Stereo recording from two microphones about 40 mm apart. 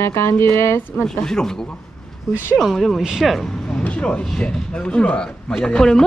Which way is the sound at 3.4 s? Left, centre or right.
Centre.